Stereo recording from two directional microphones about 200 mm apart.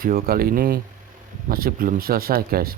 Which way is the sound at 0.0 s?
45° right (ahead or behind).